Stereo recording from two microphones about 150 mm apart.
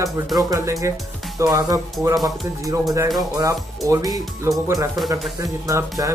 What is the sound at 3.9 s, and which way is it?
Speech, 25° right (ahead or behind).